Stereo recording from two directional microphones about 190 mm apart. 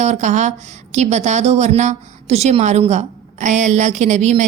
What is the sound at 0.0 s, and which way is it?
A woman's voice, 40° right (ahead or behind).